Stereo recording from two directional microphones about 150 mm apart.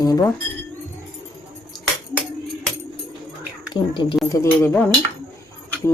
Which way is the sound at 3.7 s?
30° left (ahead or behind).